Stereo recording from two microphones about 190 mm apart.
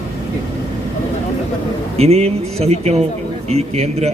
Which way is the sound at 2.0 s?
35° right (ahead or behind).